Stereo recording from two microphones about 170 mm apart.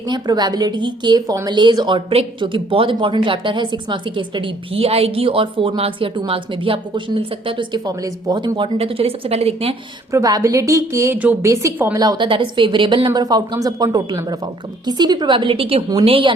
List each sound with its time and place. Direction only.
0.1 s a woman's voice: 25° right (ahead or behind)
10.1 s a woman's voice: 20° right (ahead or behind)
11.9 s a woman's voice: 25° right (ahead or behind)